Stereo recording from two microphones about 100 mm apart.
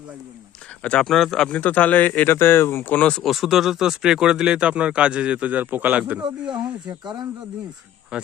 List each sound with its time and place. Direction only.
0.8 s speech: 10° left (ahead or behind); by 6.2 s 15° right (ahead or behind)
6.8 s speech: 50° right (ahead or behind)
8.1 s speech: 10° right (ahead or behind)